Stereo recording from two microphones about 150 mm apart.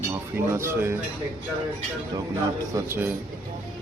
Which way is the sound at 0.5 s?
15° right (ahead or behind).